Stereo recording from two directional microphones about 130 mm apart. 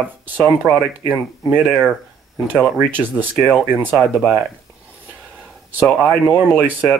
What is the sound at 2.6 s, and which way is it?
Speech, 10° right (ahead or behind).